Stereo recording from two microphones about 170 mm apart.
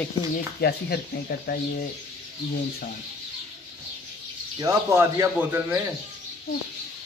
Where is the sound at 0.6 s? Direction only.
70° left (ahead or behind).